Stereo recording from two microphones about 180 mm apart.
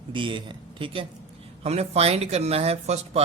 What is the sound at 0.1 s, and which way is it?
Speech, 25° right (ahead or behind).